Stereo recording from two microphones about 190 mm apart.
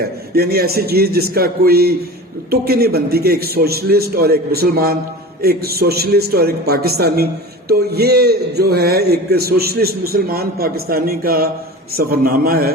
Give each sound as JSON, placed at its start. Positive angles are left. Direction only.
{"t": 0.3, "sound": "a man's voice", "side_deg": -55}